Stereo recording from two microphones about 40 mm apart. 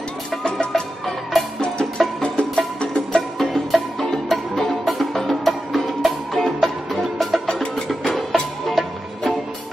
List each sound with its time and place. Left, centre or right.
0.5 s music: left
3.2 s music: centre